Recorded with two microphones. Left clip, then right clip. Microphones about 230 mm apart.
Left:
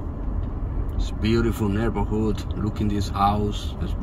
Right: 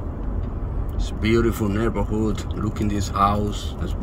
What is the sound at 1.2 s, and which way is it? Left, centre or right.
Speech, left.